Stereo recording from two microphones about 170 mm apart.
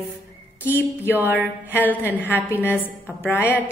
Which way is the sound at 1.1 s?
10° right (ahead or behind).